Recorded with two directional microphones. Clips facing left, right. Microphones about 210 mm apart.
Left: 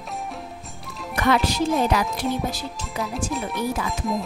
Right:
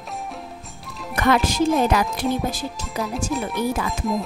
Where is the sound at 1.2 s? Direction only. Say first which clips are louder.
Right 2 dB; 50° right (ahead or behind).